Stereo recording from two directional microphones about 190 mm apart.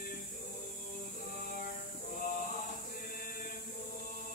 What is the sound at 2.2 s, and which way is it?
Male singing, 45° left (ahead or behind).